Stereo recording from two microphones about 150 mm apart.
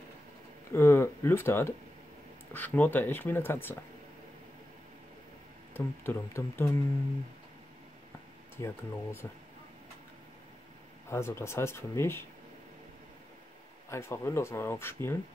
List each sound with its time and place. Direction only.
0.7 s speech: 15° left (ahead or behind)
5.7 s speech: 15° left (ahead or behind)
8.5 s speech: 15° left (ahead or behind)
11.1 s speech: 15° left (ahead or behind)
13.8 s speech: 15° left (ahead or behind)